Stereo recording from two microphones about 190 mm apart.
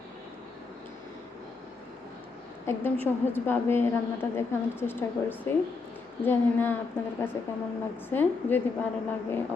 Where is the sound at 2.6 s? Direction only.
10° left (ahead or behind).